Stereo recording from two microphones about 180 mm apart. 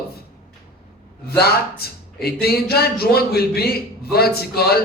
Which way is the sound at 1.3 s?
60° left (ahead or behind).